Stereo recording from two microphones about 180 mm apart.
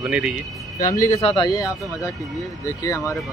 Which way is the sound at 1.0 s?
35° left (ahead or behind).